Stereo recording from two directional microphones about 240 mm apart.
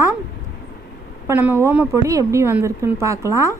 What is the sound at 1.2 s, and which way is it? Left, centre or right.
A woman's voice, centre.